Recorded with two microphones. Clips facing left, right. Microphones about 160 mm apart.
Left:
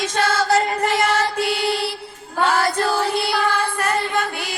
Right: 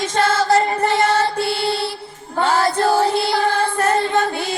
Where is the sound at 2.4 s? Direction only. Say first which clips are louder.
Right 2 dB; 30° right (ahead or behind).